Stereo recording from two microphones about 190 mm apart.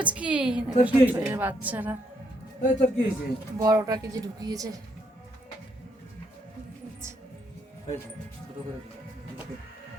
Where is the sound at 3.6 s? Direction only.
20° right (ahead or behind).